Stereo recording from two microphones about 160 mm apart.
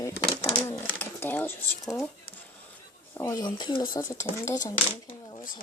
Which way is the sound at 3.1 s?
15° left (ahead or behind).